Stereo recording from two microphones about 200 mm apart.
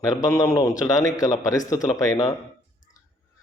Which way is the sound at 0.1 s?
15° left (ahead or behind).